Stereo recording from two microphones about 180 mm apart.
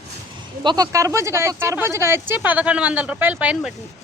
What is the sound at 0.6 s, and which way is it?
Speech, 20° right (ahead or behind).